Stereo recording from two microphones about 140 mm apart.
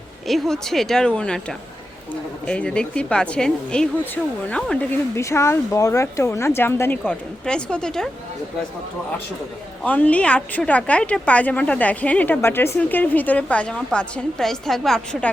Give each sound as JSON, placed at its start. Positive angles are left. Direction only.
{"t": 0.3, "sound": "a woman's voice", "side_deg": 0}
{"t": 5.1, "sound": "speech", "side_deg": 20}
{"t": 7.1, "sound": "speech", "side_deg": 5}
{"t": 9.8, "sound": "a woman's voice", "side_deg": 10}